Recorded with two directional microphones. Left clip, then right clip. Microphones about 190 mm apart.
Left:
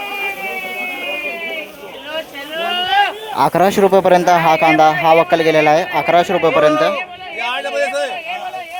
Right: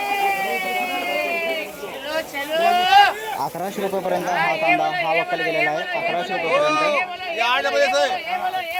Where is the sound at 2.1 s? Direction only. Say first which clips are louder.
Right 1 dB; 40° left (ahead or behind).